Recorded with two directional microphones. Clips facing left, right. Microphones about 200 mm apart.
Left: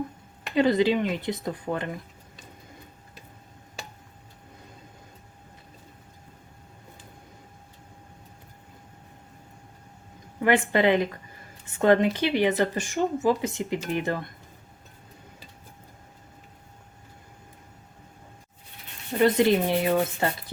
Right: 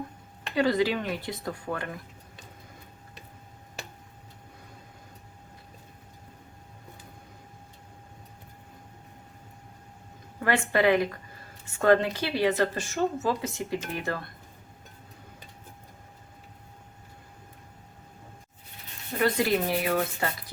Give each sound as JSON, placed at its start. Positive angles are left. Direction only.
{"t": 0.5, "sound": "speech", "side_deg": 20}
{"t": 10.4, "sound": "speech", "side_deg": 20}
{"t": 19.2, "sound": "speech", "side_deg": 25}